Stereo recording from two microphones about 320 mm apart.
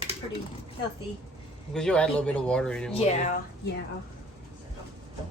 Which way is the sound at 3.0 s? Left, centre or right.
Left.